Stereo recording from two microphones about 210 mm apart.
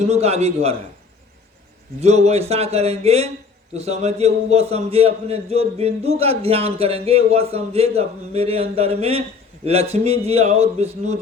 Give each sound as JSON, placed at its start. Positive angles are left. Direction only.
{"t": 0.0, "sound": "a man's voice", "side_deg": -30}
{"t": 2.0, "sound": "a man's voice", "side_deg": -30}